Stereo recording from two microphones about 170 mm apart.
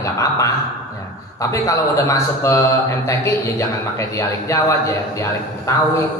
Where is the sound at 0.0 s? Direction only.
20° left (ahead or behind).